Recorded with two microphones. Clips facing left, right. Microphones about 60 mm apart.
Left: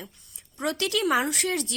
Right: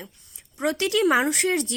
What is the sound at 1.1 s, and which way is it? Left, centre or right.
Speech, right.